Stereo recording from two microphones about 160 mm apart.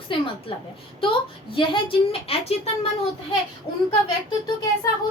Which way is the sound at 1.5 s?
35° left (ahead or behind).